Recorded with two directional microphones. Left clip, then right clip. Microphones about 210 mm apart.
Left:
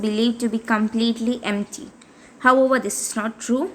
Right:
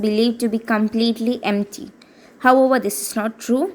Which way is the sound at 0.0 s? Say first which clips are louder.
Right 3 dB; 20° right (ahead or behind).